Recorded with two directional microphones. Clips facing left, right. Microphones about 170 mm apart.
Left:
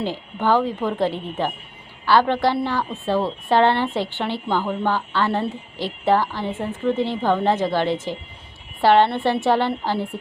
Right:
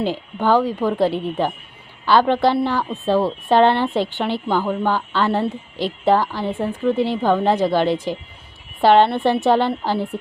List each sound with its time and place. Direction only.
0.0 s a woman's voice: 15° right (ahead or behind)